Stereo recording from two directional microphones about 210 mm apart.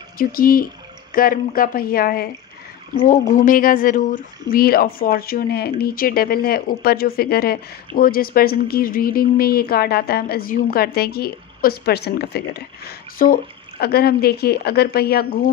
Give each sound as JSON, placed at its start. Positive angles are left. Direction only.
{"t": 0.2, "sound": "speech", "side_deg": 45}